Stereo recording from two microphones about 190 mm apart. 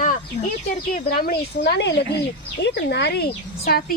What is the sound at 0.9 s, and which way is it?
Speech, 50° left (ahead or behind).